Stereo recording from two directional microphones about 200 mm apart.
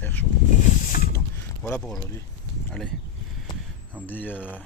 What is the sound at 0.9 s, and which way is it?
Mechanisms, 45° left (ahead or behind).